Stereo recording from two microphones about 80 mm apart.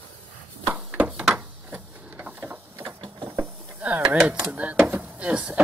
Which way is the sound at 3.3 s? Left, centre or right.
Right.